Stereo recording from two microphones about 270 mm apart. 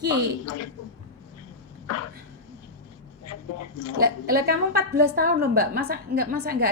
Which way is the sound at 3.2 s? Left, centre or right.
Left.